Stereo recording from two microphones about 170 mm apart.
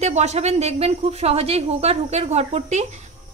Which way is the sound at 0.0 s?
40° right (ahead or behind).